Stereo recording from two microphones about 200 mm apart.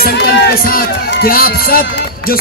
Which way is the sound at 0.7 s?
45° left (ahead or behind).